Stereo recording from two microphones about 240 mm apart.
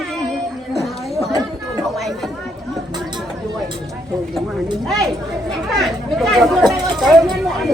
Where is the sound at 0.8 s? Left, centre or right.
Centre.